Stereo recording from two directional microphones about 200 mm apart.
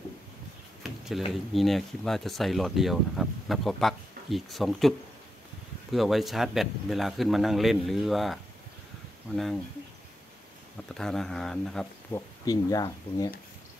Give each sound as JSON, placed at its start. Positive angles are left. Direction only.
{"t": 0.8, "sound": "speech", "side_deg": 0}
{"t": 11.0, "sound": "speech", "side_deg": 5}
{"t": 12.1, "sound": "speech", "side_deg": 15}